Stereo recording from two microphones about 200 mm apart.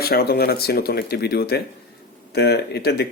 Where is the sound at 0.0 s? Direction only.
50° left (ahead or behind).